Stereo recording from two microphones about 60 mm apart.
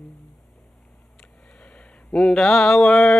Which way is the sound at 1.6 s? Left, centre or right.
Centre.